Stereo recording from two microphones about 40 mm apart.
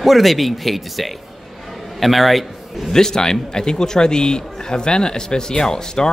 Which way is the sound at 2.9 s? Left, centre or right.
Centre.